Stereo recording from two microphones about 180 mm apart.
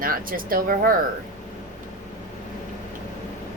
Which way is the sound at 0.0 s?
50° right (ahead or behind).